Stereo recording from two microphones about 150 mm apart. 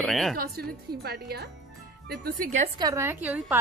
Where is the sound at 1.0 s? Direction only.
90° right.